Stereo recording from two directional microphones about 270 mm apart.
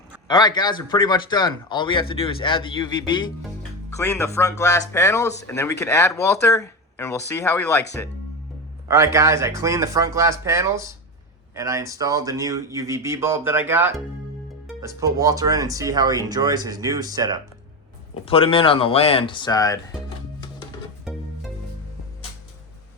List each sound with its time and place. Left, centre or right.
0.3 s a man's voice: centre
9.1 s speech: centre
18.1 s speech: left
21.0 s music: centre